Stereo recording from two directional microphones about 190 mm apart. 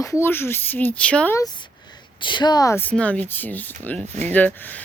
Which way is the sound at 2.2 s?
25° left (ahead or behind).